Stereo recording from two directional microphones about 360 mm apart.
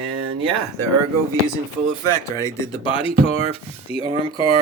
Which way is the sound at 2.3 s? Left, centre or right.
Centre.